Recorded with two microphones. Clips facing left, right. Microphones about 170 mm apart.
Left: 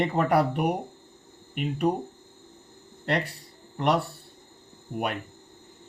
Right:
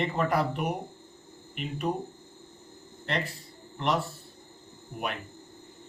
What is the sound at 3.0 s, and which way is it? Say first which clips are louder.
Speech: left 4 dB; 65° left (ahead or behind).